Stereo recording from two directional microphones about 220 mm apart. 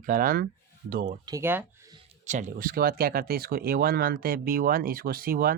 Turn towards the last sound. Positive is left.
turn(degrees=-40)  # may be behind; listen again after turning